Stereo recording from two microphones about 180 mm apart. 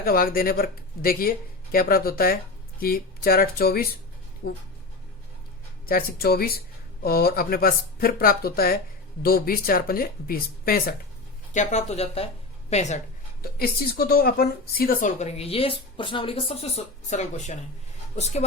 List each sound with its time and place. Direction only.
0.0 s speech: 55° left (ahead or behind)
5.8 s speech: 55° left (ahead or behind)
11.5 s speech: 40° left (ahead or behind)
13.4 s speech: 60° left (ahead or behind); by 18.4 s 40° left (ahead or behind)